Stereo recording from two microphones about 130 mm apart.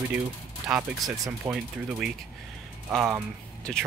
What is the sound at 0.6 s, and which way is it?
Speech, 5° right (ahead or behind).